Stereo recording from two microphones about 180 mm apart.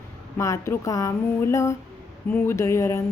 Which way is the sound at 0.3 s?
15° left (ahead or behind).